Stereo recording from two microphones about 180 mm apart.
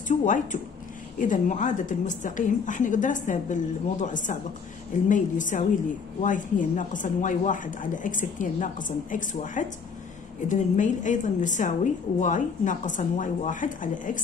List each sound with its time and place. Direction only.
0.1 s a woman's voice: 45° left (ahead or behind)